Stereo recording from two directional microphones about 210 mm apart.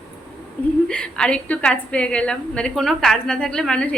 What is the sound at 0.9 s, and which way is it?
A woman's voice, 5° left (ahead or behind).